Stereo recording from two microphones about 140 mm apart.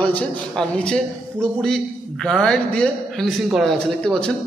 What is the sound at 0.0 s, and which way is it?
A man's voice, 10° left (ahead or behind).